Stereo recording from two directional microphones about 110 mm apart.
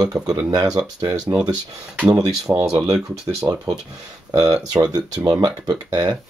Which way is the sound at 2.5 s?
30° right (ahead or behind).